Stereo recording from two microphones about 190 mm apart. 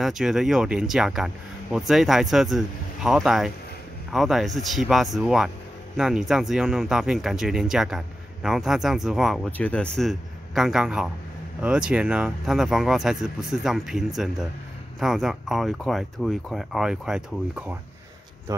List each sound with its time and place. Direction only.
0.0 s speech: centre (ahead or behind)